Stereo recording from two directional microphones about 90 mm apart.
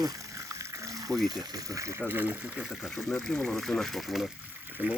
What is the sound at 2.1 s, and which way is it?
Speech, 20° right (ahead or behind).